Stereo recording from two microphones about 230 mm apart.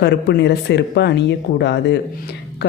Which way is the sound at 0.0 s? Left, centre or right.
Left.